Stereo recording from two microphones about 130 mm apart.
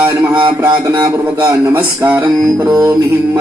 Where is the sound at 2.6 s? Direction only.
5° right (ahead or behind).